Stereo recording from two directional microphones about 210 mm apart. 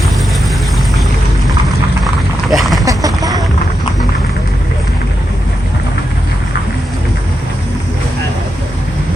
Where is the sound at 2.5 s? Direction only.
Centre (ahead or behind).